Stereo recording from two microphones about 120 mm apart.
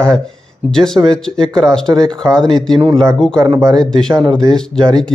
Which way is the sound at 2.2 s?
5° left (ahead or behind).